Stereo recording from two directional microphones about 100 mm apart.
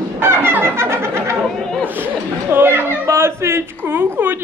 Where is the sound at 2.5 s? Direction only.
20° right (ahead or behind).